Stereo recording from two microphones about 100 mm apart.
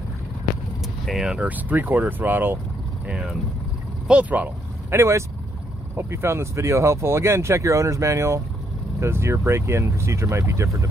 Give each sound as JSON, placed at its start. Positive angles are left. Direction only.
{"t": 1.0, "sound": "speech", "side_deg": -5}
{"t": 3.1, "sound": "speech", "side_deg": -5}
{"t": 4.9, "sound": "speech", "side_deg": -30}